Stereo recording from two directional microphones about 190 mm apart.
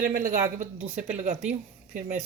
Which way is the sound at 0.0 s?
45° right (ahead or behind).